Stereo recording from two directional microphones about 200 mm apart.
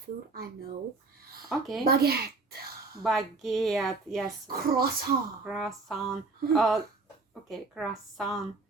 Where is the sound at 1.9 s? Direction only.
50° right (ahead or behind).